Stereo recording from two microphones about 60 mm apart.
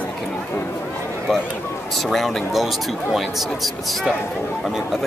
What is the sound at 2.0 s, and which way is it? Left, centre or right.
Speech, centre.